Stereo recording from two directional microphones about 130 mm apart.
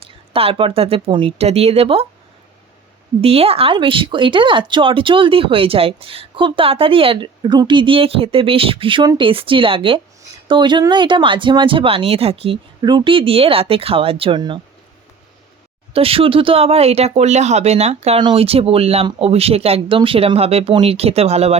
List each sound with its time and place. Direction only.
0.3 s speech: 45° right (ahead or behind)
3.2 s speech: 50° right (ahead or behind)
12.8 s speech: 40° right (ahead or behind)
15.9 s speech: 45° right (ahead or behind)
18.2 s speech: 40° right (ahead or behind)